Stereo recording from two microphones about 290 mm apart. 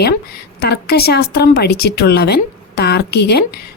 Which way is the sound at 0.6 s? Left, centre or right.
Left.